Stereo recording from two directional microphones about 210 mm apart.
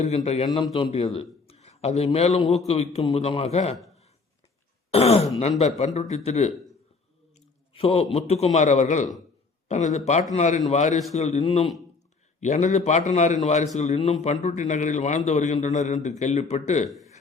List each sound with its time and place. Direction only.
0.0 s a man's voice: 30° left (ahead or behind)
4.9 s a man's voice: 30° left (ahead or behind)